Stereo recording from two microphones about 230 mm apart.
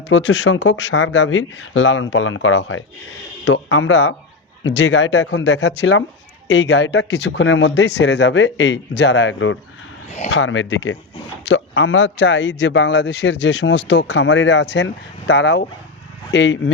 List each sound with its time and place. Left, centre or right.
0.1 s speech: left
5.3 s a man's voice: left